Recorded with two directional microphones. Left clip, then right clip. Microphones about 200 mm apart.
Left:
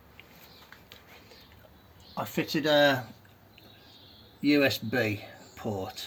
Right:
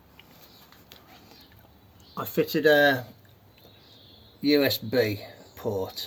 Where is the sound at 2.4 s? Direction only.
15° right (ahead or behind).